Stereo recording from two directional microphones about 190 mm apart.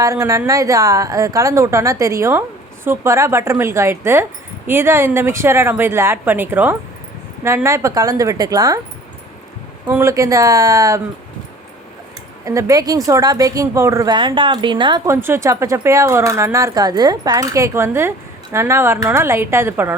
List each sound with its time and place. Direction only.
0.0 s speech: 15° right (ahead or behind)
9.9 s speech: 15° right (ahead or behind)
12.5 s speech: 15° right (ahead or behind)